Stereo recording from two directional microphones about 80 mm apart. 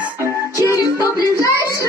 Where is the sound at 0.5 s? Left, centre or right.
Left.